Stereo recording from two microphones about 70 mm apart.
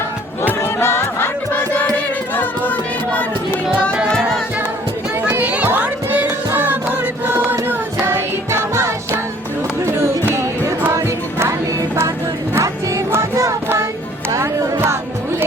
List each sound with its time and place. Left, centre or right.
0.4 s music: left
5.4 s music: centre; by 8.9 s right
10.3 s music: right
12.5 s music: right